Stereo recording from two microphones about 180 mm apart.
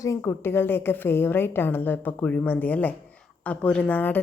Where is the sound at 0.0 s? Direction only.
15° left (ahead or behind).